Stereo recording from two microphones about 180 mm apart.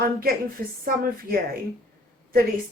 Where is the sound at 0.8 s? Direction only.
55° right (ahead or behind).